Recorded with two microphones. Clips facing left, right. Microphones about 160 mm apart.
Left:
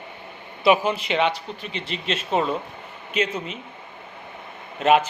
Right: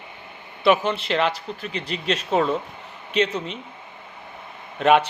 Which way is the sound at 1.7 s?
40° right (ahead or behind).